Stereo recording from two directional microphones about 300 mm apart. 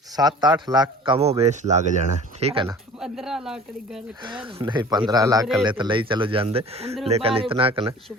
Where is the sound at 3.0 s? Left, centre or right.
Centre.